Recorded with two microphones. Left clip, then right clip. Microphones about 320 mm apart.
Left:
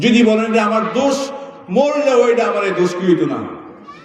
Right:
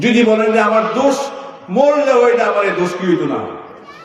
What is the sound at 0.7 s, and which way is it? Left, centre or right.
Speech, centre.